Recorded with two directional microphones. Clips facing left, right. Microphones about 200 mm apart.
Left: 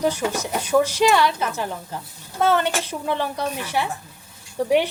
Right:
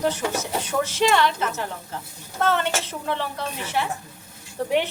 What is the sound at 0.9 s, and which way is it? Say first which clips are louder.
Speech: left 2 dB; 10° left (ahead or behind).